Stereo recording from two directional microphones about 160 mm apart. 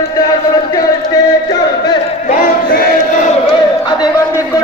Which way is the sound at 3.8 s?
25° left (ahead or behind).